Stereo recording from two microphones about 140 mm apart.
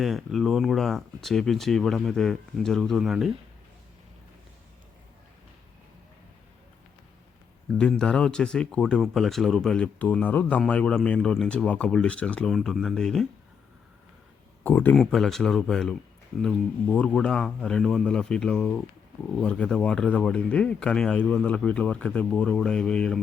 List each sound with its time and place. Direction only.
0.0 s speech: centre (ahead or behind)
7.8 s speech: 5° left (ahead or behind)
14.6 s speech: 15° left (ahead or behind)
14.9 s speech: centre (ahead or behind)